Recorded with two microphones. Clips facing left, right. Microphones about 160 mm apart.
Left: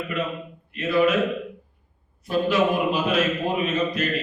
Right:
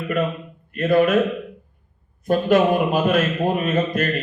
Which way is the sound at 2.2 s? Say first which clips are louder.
Right 4 dB; 50° right (ahead or behind).